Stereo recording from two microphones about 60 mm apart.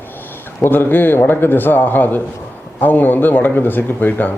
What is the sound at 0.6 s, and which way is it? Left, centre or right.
Speech, left.